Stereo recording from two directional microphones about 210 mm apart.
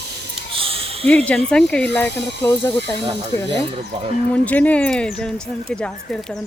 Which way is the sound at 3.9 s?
25° right (ahead or behind).